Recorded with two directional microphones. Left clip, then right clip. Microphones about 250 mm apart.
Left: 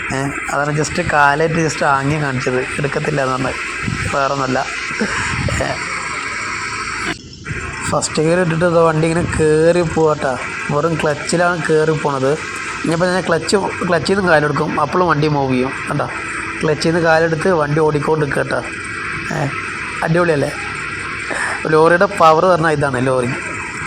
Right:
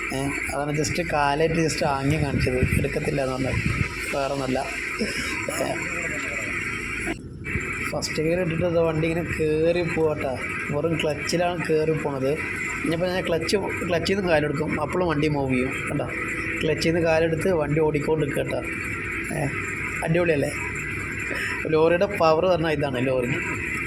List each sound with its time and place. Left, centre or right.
0.5 s speech: centre
7.9 s speech: left
12.9 s speech: left
20.1 s speech: centre
21.7 s speech: centre